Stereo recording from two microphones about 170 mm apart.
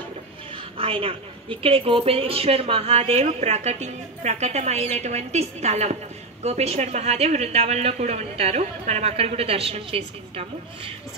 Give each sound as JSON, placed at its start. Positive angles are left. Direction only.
{"t": 0.7, "sound": "a woman's voice", "side_deg": -35}